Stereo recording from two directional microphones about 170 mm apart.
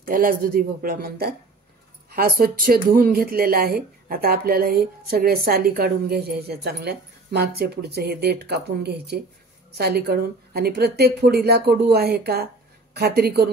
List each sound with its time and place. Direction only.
0.0 s a woman's voice: 55° right (ahead or behind)